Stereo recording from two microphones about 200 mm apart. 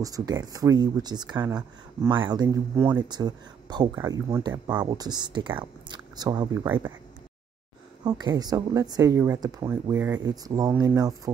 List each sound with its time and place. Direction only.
0.0 s speech: 20° right (ahead or behind)
8.0 s speech: 20° right (ahead or behind)